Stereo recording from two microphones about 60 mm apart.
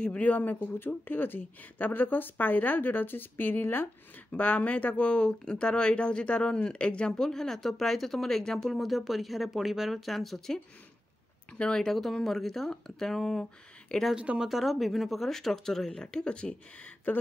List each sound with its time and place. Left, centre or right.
0.0 s speech: left
4.3 s speech: left
14.1 s speech: right
14.4 s speech: centre